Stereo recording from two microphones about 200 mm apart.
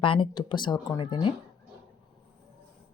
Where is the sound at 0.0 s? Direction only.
25° left (ahead or behind).